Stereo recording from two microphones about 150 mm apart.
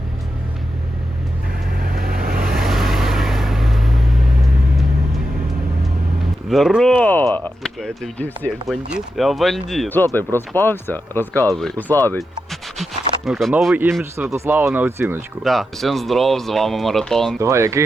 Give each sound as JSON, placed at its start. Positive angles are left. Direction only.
{"t": 1.7, "sound": "vehicle", "side_deg": -85}
{"t": 2.4, "sound": "vehicle", "side_deg": 0}
{"t": 6.5, "sound": "speech", "side_deg": 0}
{"t": 6.9, "sound": "speech", "side_deg": 10}
{"t": 8.6, "sound": "speech", "side_deg": -5}
{"t": 9.9, "sound": "speech", "side_deg": 15}
{"t": 12.5, "sound": "a sound", "side_deg": 0}
{"t": 14.3, "sound": "speech", "side_deg": -15}
{"t": 15.4, "sound": "speech", "side_deg": 0}
{"t": 17.4, "sound": "speech", "side_deg": -20}